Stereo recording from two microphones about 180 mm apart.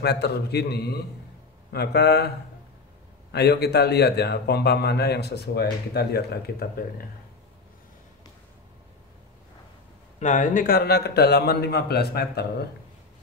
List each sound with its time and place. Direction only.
0.0 s speech: 65° left (ahead or behind)
10.1 s speech: 45° left (ahead or behind); by 12.6 s 65° left (ahead or behind)